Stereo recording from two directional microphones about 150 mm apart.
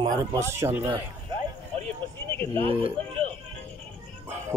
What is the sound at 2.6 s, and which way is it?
Speech, 35° right (ahead or behind).